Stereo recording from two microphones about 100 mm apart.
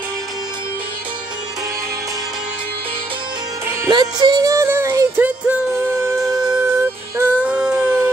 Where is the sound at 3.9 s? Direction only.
45° right (ahead or behind).